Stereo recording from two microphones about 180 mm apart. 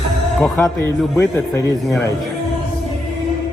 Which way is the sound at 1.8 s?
Centre (ahead or behind).